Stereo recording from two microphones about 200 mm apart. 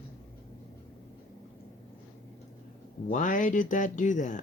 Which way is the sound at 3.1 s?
40° left (ahead or behind).